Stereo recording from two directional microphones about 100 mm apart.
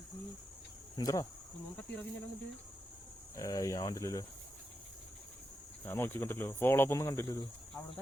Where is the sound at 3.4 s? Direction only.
35° left (ahead or behind).